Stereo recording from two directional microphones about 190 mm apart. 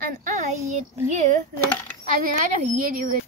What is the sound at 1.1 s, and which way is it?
Speech, 40° right (ahead or behind).